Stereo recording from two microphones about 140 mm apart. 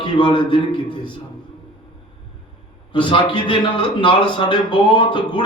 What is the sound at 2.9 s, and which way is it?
A man's voice, 35° left (ahead or behind).